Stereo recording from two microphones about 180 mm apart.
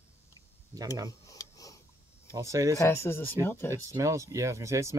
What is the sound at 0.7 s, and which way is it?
Speech, 20° right (ahead or behind).